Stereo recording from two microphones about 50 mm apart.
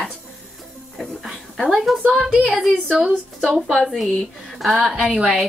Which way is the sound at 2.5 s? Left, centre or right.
Centre.